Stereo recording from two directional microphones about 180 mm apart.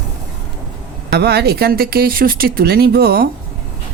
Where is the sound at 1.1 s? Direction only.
65° right (ahead or behind).